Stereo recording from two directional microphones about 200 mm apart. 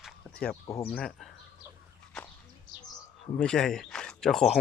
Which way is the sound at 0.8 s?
5° left (ahead or behind).